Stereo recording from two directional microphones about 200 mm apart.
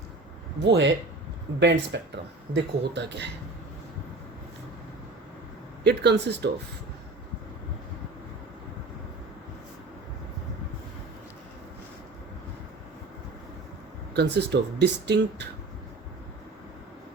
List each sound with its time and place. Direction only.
0.6 s speech: 60° right (ahead or behind)
5.8 s speech: 55° right (ahead or behind)
14.1 s speech: 55° right (ahead or behind)